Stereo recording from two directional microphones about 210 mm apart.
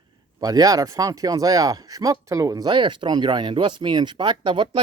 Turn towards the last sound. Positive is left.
turn(degrees=-20)  # may be behind; listen again after turning